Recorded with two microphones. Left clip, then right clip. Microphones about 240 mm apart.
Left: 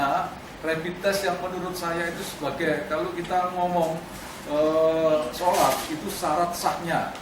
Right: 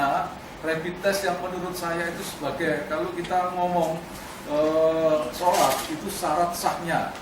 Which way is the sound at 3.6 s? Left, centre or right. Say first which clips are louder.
Even; right.